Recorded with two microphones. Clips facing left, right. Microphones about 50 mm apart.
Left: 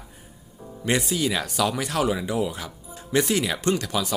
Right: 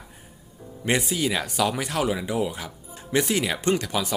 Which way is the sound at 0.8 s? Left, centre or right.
Centre.